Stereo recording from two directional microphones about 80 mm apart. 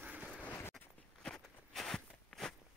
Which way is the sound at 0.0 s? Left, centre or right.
Centre.